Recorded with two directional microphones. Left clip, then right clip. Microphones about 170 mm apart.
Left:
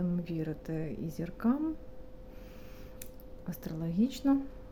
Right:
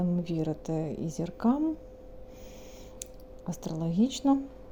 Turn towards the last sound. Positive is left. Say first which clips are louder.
# right 3 dB
turn(degrees=-15)  # may be behind; listen again after turning